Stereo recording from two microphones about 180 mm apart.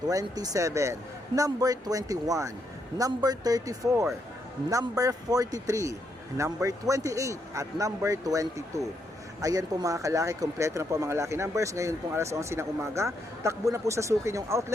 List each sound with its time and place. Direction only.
0.1 s speech: 20° right (ahead or behind)